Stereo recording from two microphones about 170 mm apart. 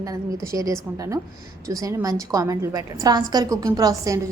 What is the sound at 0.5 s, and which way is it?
A woman's voice, 20° right (ahead or behind).